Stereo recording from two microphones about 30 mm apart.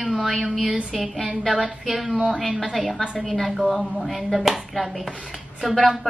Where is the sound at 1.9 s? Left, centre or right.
Centre.